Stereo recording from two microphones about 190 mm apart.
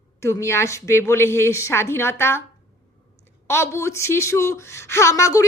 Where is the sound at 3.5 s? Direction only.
15° left (ahead or behind).